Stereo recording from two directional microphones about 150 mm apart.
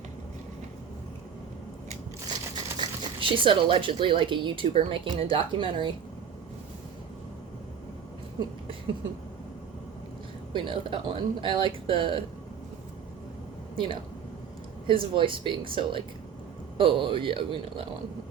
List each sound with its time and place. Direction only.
3.0 s speech: 35° right (ahead or behind)
10.5 s speech: 35° right (ahead or behind)
13.7 s speech: 35° right (ahead or behind)